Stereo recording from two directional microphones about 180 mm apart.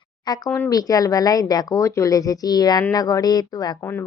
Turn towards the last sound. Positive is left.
turn(degrees=15)  # may be behind; listen again after turning